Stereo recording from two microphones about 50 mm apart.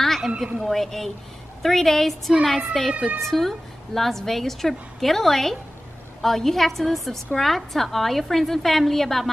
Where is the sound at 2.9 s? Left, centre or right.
Right.